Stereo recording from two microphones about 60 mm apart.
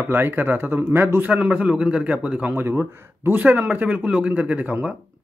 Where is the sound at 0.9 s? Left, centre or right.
Right.